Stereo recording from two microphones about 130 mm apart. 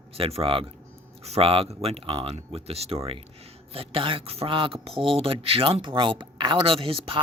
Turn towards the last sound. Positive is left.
turn(degrees=-45)  # may be behind; listen again after turning